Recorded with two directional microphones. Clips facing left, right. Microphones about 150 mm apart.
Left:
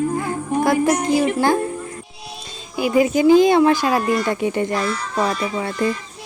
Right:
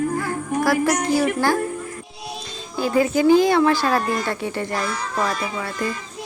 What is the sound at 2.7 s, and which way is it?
Speech, 15° left (ahead or behind).